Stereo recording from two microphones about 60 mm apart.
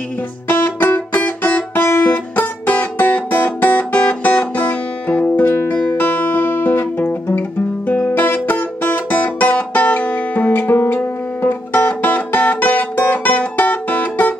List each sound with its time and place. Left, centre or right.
0.5 s music: left
10.6 s music: left